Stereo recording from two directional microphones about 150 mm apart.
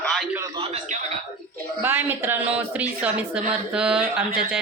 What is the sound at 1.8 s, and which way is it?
A woman's voice, 15° right (ahead or behind).